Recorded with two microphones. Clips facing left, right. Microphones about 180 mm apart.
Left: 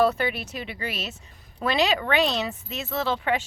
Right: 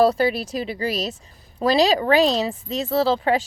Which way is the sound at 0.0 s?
35° right (ahead or behind).